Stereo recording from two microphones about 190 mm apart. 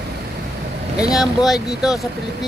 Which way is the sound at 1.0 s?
Centre (ahead or behind).